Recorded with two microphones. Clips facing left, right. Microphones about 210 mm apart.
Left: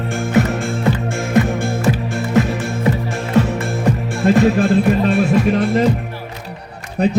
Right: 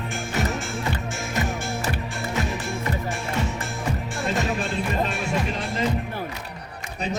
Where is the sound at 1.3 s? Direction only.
55° left (ahead or behind).